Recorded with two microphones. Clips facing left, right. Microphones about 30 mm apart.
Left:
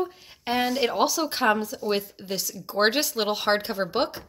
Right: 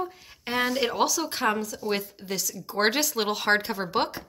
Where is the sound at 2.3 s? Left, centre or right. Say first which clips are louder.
Left 1 dB; left.